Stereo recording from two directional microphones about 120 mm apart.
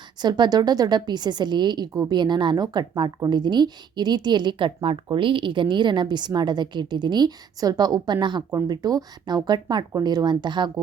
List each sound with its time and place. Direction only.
0.2 s a woman's voice: 40° right (ahead or behind)